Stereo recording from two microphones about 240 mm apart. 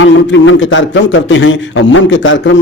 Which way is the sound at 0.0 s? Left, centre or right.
Left.